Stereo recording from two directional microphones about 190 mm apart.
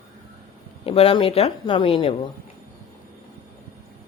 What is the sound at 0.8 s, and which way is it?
Speech, 30° left (ahead or behind).